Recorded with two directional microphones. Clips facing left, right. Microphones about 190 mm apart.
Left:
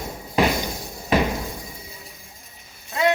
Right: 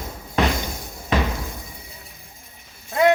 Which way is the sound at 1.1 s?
15° left (ahead or behind).